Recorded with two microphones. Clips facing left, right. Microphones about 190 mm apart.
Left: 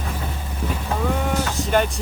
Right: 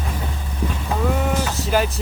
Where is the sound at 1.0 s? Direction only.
5° right (ahead or behind).